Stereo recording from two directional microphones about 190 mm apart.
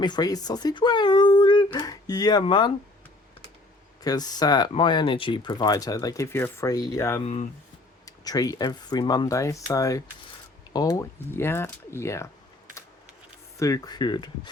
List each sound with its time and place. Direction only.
0.0 s speech: 20° left (ahead or behind)
4.0 s speech: 20° left (ahead or behind)
13.6 s speech: 20° left (ahead or behind)